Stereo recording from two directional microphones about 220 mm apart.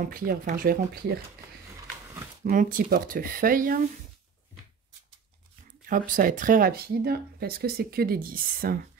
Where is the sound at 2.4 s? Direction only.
40° right (ahead or behind).